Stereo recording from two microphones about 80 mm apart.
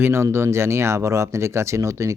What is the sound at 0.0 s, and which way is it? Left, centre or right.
Speech, right.